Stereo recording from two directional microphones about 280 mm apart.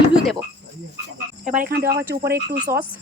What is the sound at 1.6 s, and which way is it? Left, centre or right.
Speech, right.